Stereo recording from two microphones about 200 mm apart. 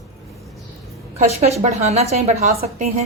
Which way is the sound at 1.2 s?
30° right (ahead or behind).